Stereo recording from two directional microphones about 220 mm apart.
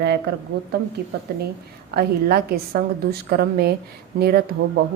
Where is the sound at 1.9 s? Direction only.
45° right (ahead or behind).